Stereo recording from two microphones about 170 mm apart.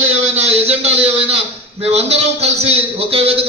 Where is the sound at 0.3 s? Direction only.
40° right (ahead or behind).